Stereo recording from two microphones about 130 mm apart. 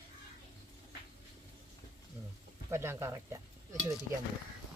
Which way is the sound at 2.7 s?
20° right (ahead or behind).